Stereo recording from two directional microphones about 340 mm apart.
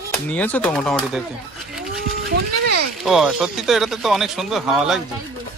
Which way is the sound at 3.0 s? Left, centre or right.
Centre.